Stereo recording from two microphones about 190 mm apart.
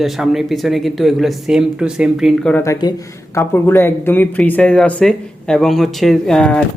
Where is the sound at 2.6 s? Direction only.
20° left (ahead or behind).